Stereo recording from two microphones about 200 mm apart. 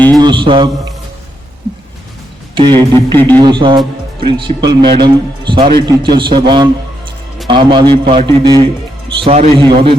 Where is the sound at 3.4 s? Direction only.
25° right (ahead or behind).